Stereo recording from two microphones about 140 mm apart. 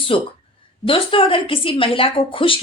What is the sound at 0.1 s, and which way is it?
Speech, 40° left (ahead or behind).